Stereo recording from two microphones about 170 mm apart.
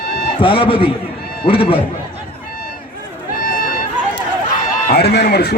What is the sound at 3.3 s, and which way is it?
Run, 55° left (ahead or behind).